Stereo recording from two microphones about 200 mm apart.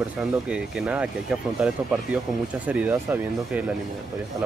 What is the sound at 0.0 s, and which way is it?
Speech, 5° right (ahead or behind).